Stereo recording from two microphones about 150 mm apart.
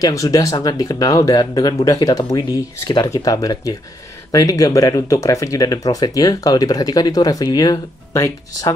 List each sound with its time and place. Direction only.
0.0 s speech: 20° left (ahead or behind)